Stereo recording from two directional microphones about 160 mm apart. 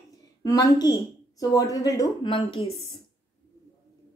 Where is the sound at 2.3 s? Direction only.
30° left (ahead or behind).